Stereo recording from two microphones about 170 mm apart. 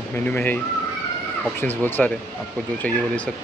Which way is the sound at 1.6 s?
10° left (ahead or behind).